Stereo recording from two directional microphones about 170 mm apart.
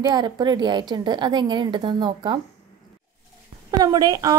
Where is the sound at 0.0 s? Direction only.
25° right (ahead or behind).